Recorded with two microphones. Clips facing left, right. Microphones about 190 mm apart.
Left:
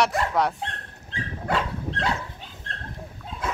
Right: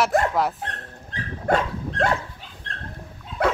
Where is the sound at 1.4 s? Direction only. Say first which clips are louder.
Right 5 dB; 50° right (ahead or behind).